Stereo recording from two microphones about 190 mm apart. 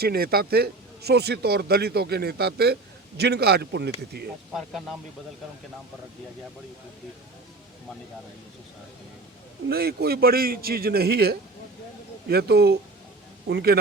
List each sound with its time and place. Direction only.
0.0 s speech: 55° right (ahead or behind)
4.5 s speech: centre (ahead or behind)
9.6 s speech: 55° right (ahead or behind)